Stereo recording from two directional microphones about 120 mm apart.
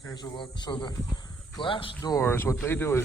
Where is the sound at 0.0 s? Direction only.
35° left (ahead or behind).